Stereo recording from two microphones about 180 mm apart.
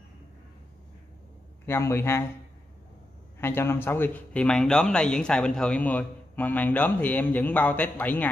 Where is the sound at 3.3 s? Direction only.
10° left (ahead or behind).